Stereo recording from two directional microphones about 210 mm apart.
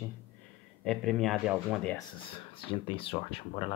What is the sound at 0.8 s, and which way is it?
Speech, centre (ahead or behind).